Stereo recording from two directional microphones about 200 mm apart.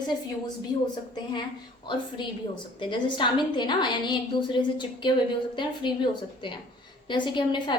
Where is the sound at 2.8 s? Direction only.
25° left (ahead or behind).